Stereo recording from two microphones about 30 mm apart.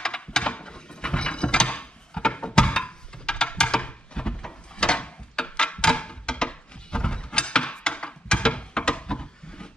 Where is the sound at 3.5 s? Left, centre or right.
Left.